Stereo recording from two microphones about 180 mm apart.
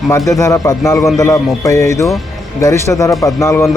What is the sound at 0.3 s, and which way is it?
A man's voice, 20° left (ahead or behind).